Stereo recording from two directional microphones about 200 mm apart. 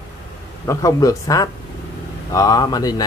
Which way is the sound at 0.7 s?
15° left (ahead or behind).